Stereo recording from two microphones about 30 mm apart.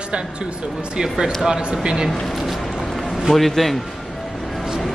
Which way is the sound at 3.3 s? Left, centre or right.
Centre.